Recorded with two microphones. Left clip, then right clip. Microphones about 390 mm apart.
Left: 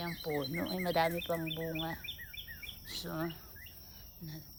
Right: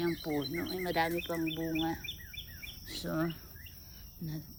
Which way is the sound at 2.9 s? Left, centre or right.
Centre.